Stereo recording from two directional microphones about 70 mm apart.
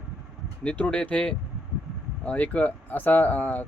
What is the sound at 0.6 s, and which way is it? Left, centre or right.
Speech, centre.